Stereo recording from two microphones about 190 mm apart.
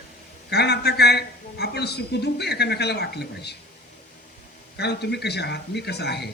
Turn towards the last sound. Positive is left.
turn(degrees=60)  # may be behind; listen again after turning